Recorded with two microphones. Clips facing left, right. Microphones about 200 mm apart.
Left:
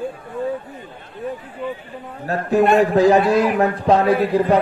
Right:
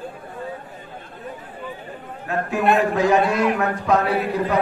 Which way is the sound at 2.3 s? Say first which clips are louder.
Left 4 dB; 35° left (ahead or behind).